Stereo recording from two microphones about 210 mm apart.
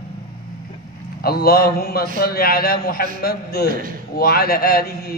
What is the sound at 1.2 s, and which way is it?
A man's voice, 45° left (ahead or behind).